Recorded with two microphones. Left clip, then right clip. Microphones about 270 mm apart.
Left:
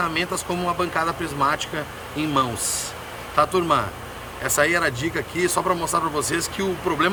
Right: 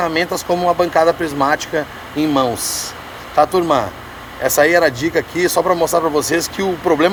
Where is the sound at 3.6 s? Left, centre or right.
Centre.